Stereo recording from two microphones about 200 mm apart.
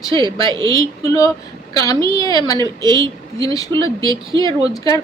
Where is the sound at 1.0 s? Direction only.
20° left (ahead or behind).